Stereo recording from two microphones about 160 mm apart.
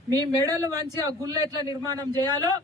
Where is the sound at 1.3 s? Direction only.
20° right (ahead or behind).